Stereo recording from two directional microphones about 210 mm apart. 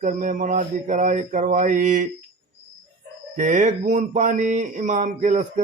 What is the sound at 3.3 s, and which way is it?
Mantra, 35° right (ahead or behind).